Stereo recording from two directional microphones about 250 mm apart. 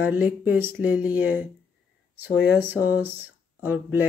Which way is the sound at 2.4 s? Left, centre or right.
Centre.